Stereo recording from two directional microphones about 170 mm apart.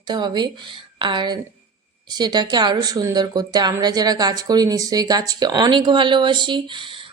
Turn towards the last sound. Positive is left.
turn(degrees=-30)  # may be behind; listen again after turning